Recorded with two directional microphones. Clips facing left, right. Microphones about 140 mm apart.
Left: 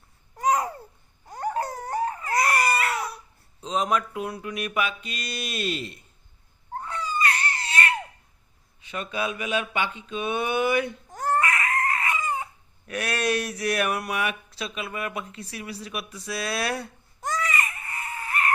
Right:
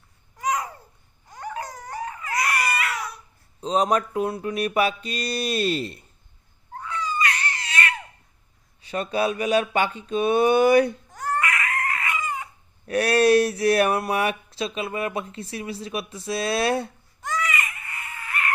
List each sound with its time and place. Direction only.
0.3 s babbling: 35° left (ahead or behind)
1.3 s crying: 35° left (ahead or behind)
3.6 s mantra: 35° right (ahead or behind)
6.7 s baby cry: 35° left (ahead or behind)
8.8 s mantra: 35° right (ahead or behind)
11.1 s crying: 25° left (ahead or behind)
12.9 s speech: 35° right (ahead or behind)
17.2 s screaming: 35° left (ahead or behind)